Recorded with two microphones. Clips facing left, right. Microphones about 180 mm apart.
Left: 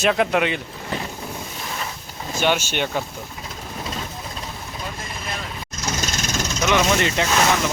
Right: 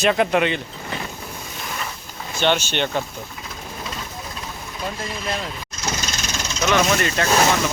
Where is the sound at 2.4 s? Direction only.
10° left (ahead or behind).